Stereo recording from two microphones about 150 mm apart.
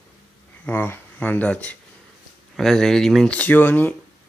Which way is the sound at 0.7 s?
15° left (ahead or behind).